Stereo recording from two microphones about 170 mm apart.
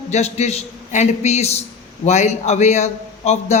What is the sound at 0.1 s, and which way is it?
A man's voice, 40° left (ahead or behind).